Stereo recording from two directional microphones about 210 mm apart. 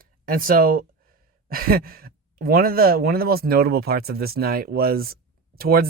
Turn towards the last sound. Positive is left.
turn(degrees=-45)  # may be behind; listen again after turning